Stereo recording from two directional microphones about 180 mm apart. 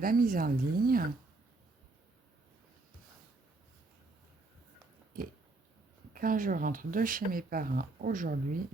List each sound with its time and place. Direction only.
0.0 s speech: 50° right (ahead or behind)
5.2 s a sound: 50° right (ahead or behind)
6.1 s speech: 50° right (ahead or behind)